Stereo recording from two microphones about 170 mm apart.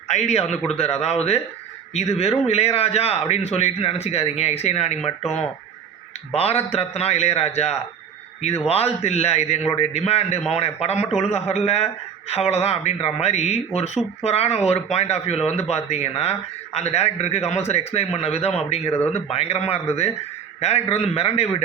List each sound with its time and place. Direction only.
0.1 s a man's voice: 40° left (ahead or behind)
6.3 s a man's voice: 35° left (ahead or behind)